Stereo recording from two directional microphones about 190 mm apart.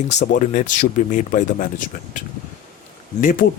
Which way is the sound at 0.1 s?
40° left (ahead or behind).